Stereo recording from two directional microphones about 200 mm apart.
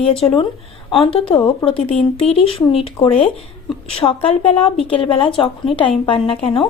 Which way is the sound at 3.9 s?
30° left (ahead or behind).